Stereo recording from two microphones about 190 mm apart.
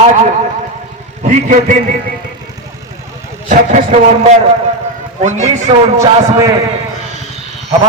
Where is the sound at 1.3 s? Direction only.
40° right (ahead or behind).